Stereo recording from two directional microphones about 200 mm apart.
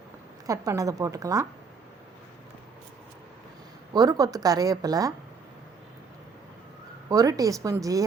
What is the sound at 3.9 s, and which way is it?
A woman's voice, 20° right (ahead or behind).